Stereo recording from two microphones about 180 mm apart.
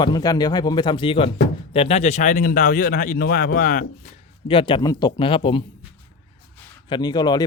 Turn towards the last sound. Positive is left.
turn(degrees=25)  # may be behind; listen again after turning